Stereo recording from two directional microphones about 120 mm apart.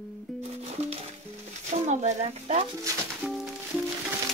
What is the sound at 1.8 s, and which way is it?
Speech, 80° right.